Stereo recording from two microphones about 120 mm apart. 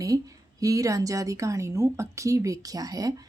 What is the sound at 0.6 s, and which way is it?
A woman's voice, 30° right (ahead or behind).